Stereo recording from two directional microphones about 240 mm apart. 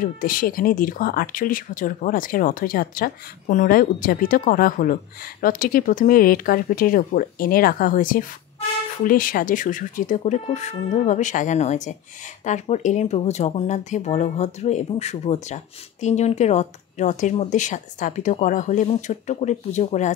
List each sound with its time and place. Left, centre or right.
0.0 s speech: left